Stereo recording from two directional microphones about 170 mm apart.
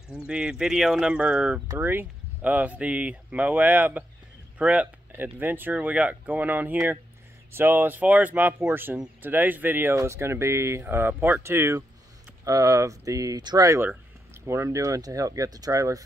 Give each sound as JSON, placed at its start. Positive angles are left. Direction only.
{"t": 0.1, "sound": "speech", "side_deg": -5}